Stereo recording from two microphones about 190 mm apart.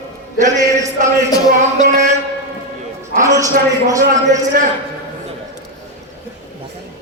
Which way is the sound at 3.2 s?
15° right (ahead or behind).